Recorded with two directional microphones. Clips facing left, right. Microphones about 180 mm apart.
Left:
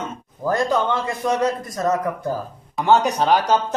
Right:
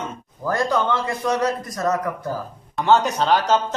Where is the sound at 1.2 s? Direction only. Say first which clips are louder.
Left 1 dB; 25° left (ahead or behind).